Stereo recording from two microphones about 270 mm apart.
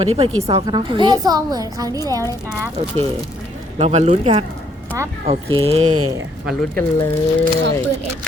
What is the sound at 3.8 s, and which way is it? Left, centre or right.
Speech, right.